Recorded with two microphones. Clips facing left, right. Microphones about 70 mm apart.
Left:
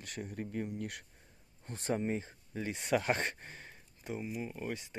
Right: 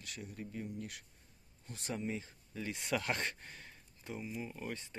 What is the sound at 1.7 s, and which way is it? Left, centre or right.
Speech, left.